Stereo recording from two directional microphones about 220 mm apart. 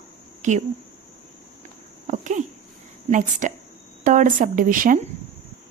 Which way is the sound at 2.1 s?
35° right (ahead or behind).